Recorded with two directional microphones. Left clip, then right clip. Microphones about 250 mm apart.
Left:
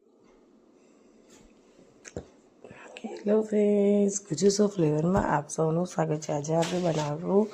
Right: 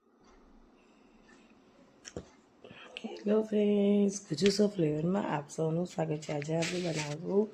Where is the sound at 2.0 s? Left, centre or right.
Centre.